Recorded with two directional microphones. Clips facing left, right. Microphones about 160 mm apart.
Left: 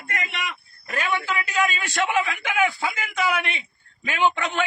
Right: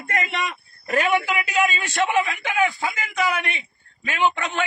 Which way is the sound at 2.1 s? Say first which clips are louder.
Right 2 dB; centre (ahead or behind).